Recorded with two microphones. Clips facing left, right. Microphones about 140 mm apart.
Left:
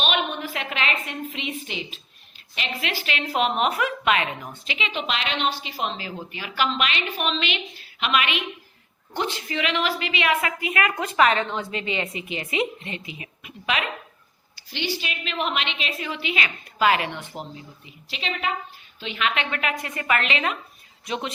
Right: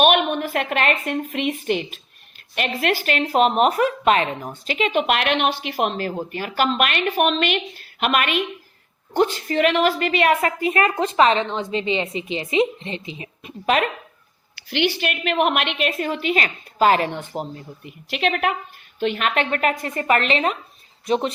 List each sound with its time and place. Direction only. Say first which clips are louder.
0.0 s a woman's voice: right 8 dB; 55° right (ahead or behind); by 13.5 s 30° right (ahead or behind)
14.5 s a woman's voice: right 7 dB; 65° right (ahead or behind); by 17.5 s 40° right (ahead or behind)
17.8 s a woman's voice: right 10 dB; 60° right (ahead or behind); by 21.3 s 40° right (ahead or behind)